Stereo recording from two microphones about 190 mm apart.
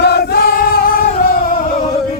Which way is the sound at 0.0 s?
55° left (ahead or behind).